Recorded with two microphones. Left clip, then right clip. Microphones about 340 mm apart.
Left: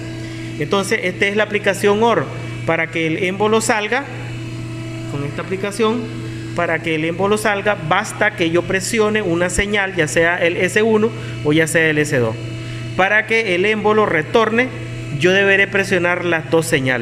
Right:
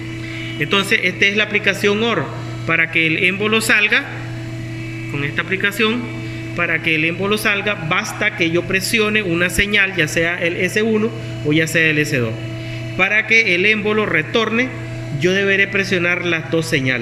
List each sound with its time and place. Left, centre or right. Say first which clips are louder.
0.6 s a man's voice: right 2 dB; centre
5.4 s a man's voice: right 2 dB; centre